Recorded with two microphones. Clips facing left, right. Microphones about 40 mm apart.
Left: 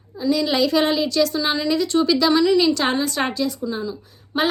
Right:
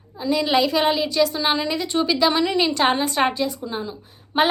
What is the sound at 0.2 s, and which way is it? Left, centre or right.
A woman's voice, right.